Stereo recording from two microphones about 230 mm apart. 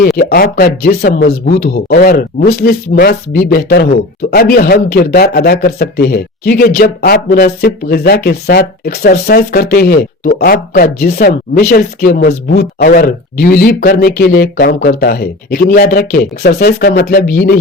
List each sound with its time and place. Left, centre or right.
0.2 s speech: left